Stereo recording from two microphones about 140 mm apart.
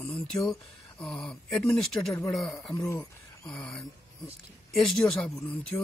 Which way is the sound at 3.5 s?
5° left (ahead or behind).